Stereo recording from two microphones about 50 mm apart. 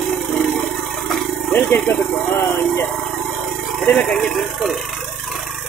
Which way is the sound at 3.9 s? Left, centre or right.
Centre.